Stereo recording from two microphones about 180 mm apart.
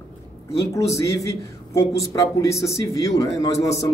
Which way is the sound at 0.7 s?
15° left (ahead or behind).